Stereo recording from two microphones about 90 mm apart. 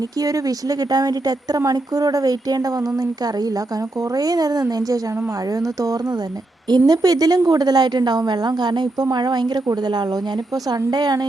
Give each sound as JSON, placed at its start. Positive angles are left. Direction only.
{"t": 0.2, "sound": "a woman's voice", "side_deg": -40}
{"t": 4.1, "sound": "a woman's voice", "side_deg": -45}
{"t": 10.7, "sound": "a woman's voice", "side_deg": -50}